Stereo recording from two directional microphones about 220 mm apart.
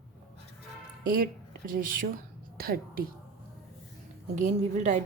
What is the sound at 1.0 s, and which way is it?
A woman's voice, 40° right (ahead or behind).